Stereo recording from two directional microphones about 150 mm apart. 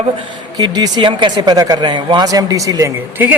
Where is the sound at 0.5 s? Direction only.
25° right (ahead or behind).